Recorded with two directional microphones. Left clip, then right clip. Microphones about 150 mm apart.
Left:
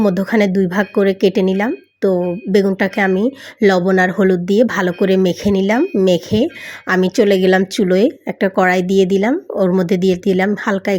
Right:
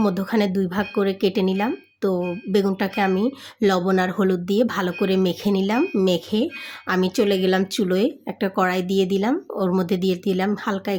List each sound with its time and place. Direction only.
0.0 s speech: 25° left (ahead or behind)